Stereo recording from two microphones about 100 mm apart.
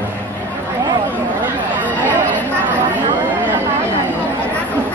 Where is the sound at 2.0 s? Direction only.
15° right (ahead or behind).